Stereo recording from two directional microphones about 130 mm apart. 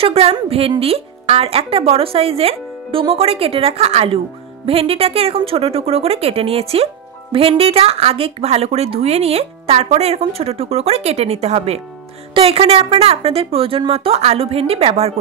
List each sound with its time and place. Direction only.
0.0 s a woman's voice: 50° right (ahead or behind)